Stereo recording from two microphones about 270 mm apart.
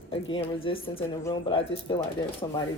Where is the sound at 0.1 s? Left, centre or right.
Centre.